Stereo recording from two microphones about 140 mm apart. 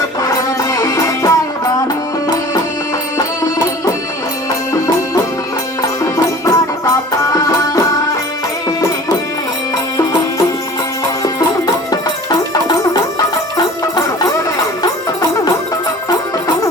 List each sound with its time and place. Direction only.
0.2 s music: 25° left (ahead or behind)
6.0 s music: 25° left (ahead or behind)
11.2 s music: 25° left (ahead or behind)